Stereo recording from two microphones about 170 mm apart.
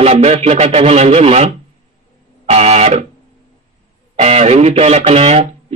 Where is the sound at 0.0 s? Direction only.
40° right (ahead or behind).